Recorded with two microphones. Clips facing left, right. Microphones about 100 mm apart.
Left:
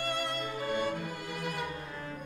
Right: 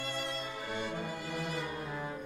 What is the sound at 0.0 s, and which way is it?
Violin, 55° left (ahead or behind).